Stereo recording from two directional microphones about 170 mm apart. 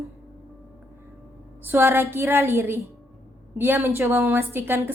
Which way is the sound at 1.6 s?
10° right (ahead or behind).